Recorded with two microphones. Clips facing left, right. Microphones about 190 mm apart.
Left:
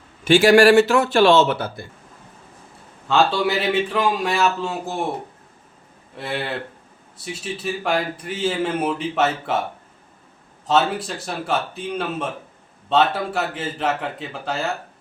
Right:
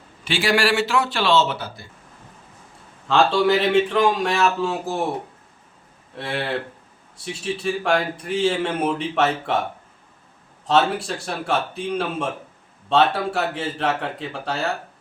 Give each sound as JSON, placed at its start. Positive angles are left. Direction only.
{"t": 0.3, "sound": "a man's voice", "side_deg": 45}
{"t": 3.1, "sound": "a man's voice", "side_deg": 5}
{"t": 6.1, "sound": "a man's voice", "side_deg": 0}
{"t": 10.7, "sound": "a man's voice", "side_deg": 0}